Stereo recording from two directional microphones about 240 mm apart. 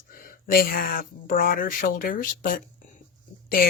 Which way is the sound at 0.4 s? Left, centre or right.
Left.